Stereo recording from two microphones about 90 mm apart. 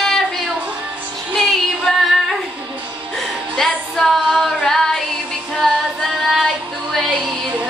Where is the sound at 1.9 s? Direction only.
5° left (ahead or behind).